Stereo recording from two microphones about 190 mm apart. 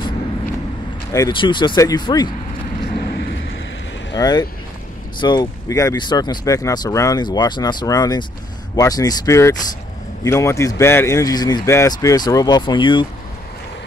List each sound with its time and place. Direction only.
1.1 s speech: 20° left (ahead or behind)
3.0 s vehicle: 60° left (ahead or behind)
4.1 s speech: 20° left (ahead or behind)